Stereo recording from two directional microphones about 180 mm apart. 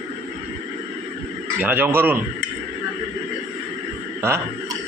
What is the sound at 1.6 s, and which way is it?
Speech, 10° right (ahead or behind).